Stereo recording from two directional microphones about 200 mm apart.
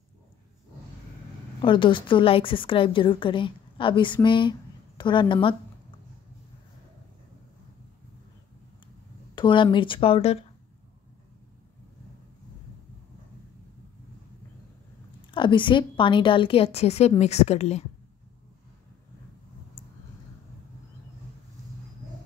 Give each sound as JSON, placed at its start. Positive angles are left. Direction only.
{"t": 1.6, "sound": "a woman's voice", "side_deg": 25}
{"t": 9.3, "sound": "a woman's voice", "side_deg": 25}
{"t": 15.3, "sound": "a woman's voice", "side_deg": 25}